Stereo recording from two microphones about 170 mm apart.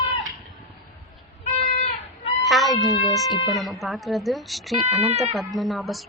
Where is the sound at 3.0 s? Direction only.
Centre (ahead or behind).